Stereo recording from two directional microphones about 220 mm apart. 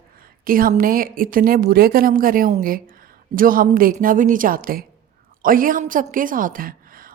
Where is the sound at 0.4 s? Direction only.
40° right (ahead or behind).